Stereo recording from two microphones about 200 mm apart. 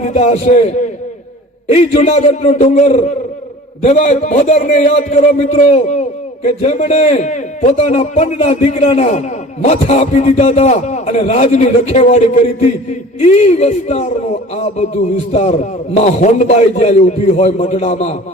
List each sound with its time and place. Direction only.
0.0 s a man's voice: 35° left (ahead or behind)